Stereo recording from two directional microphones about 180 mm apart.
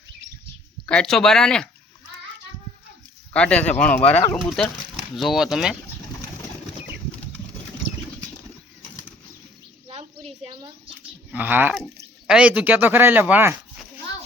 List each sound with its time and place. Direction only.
0.9 s speech: 5° left (ahead or behind)
3.3 s speech: 5° left (ahead or behind)
4.4 s speech: centre (ahead or behind)
10.4 s a child's voice: 30° right (ahead or behind)
11.3 s speech: 10° right (ahead or behind)